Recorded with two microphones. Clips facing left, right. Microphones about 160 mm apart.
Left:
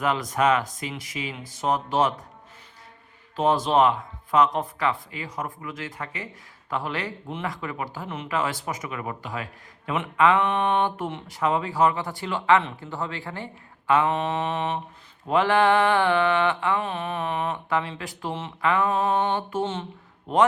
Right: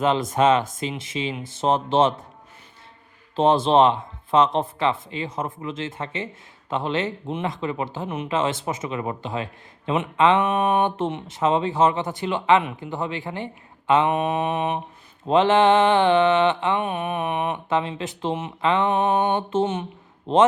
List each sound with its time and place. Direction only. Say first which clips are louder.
0.0 s speech: right 4 dB; 25° right (ahead or behind)
3.3 s speech: right 4 dB; 25° right (ahead or behind)